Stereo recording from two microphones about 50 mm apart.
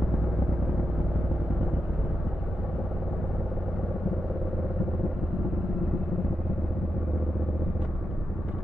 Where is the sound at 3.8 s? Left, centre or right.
Centre.